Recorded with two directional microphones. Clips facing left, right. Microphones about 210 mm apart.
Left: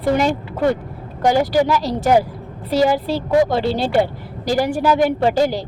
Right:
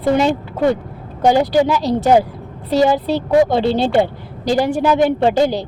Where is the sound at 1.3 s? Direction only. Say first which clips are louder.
Right 2 dB; 25° right (ahead or behind).